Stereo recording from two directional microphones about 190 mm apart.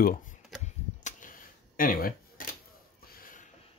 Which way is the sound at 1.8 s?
50° left (ahead or behind).